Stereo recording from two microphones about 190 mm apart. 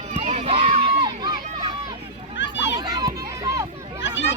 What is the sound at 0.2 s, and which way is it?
Crowd, 35° right (ahead or behind).